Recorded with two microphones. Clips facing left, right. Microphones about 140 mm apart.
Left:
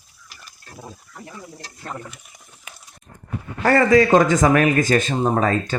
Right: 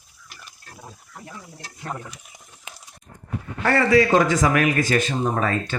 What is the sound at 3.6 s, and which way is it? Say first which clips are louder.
Speech: left 3 dB; 40° left (ahead or behind).